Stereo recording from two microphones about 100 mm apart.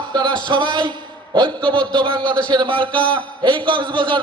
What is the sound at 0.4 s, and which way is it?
A man's voice, 50° right (ahead or behind).